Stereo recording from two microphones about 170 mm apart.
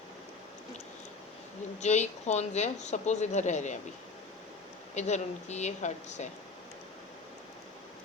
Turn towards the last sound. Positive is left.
turn(degrees=45)  # may be behind; listen again after turning